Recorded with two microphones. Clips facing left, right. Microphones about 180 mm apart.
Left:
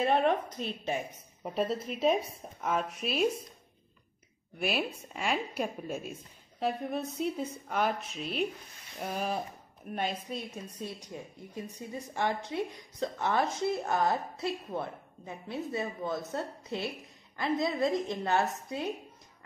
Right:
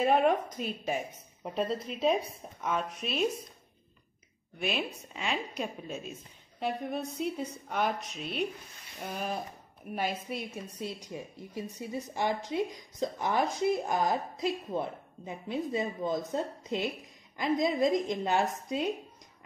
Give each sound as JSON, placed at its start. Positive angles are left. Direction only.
{"t": 0.0, "sound": "a woman's voice", "side_deg": -10}
{"t": 4.6, "sound": "a woman's voice", "side_deg": 5}
{"t": 9.8, "sound": "a woman's voice", "side_deg": -5}